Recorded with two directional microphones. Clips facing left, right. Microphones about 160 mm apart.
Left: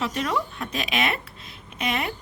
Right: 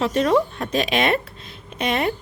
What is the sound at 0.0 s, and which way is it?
A woman's voice, 35° right (ahead or behind).